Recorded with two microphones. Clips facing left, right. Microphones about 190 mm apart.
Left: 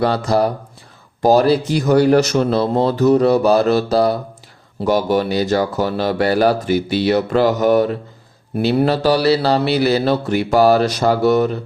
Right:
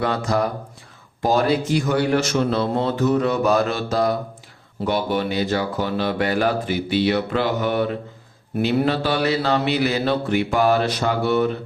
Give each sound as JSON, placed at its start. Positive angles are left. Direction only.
{"t": 0.0, "sound": "a man's voice", "side_deg": 35}